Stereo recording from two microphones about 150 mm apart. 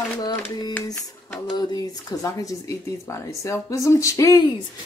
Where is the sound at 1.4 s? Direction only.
25° left (ahead or behind).